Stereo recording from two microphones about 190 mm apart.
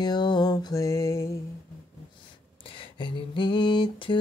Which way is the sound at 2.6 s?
25° left (ahead or behind).